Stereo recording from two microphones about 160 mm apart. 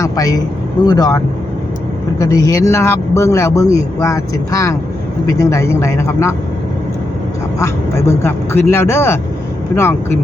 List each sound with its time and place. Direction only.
0.0 s vehicle: 20° left (ahead or behind)
0.9 s speech: 25° left (ahead or behind)
7.6 s speech: 15° left (ahead or behind)